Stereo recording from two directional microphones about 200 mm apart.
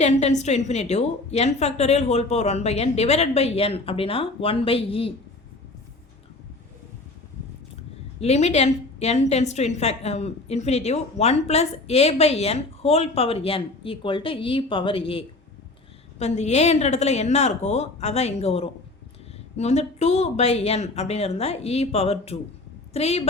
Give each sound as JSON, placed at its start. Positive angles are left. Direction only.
{"t": 0.0, "sound": "a woman's voice", "side_deg": 35}
{"t": 8.2, "sound": "a woman's voice", "side_deg": 35}